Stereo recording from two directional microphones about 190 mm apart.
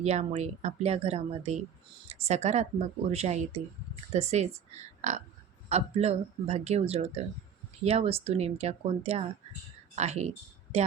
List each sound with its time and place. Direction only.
0.0 s speech: 35° right (ahead or behind)